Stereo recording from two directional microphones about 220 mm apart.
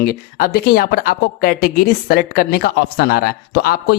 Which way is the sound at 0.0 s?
40° left (ahead or behind).